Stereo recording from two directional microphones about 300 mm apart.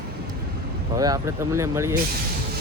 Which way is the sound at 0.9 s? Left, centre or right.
Centre.